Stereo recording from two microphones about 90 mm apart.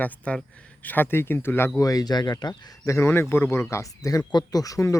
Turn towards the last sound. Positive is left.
turn(degrees=40)  # may be behind; listen again after turning